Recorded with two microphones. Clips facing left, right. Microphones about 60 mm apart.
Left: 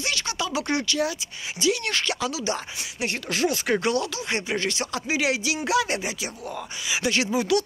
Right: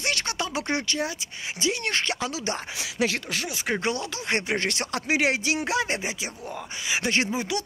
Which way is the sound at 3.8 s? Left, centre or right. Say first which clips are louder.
Left 4 dB; right.